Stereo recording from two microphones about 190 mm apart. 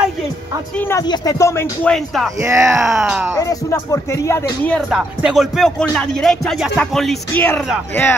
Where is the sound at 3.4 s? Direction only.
15° left (ahead or behind).